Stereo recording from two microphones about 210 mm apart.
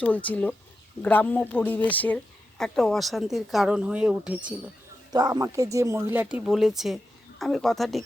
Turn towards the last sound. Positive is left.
turn(degrees=0)  # may be behind; listen again after turning